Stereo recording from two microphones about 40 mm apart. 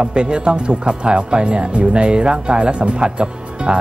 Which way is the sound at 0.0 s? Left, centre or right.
Right.